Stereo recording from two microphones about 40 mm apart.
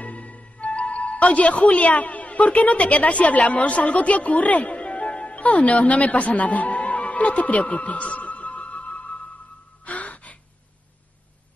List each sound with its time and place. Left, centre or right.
0.0 s music: left
1.7 s a woman's voice: left
9.8 s music: left